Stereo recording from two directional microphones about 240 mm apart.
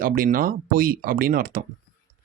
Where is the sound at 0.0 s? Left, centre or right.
Right.